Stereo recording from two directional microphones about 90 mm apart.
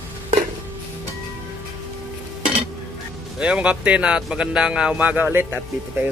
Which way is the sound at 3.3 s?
10° right (ahead or behind).